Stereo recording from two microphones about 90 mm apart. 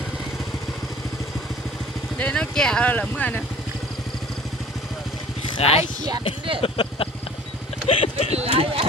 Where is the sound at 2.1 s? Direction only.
15° left (ahead or behind).